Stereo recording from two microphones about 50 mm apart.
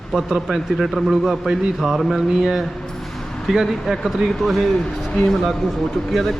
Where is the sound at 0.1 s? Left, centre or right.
Centre.